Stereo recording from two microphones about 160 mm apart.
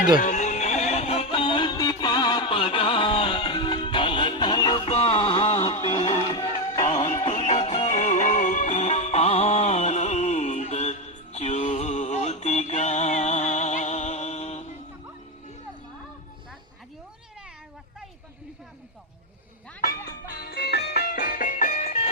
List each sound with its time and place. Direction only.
0.2 s music: 50° left (ahead or behind); by 6.8 s 25° left (ahead or behind)
6.8 s music: 40° left (ahead or behind)
19.8 s music: 65° left (ahead or behind); by 22.1 s 45° left (ahead or behind)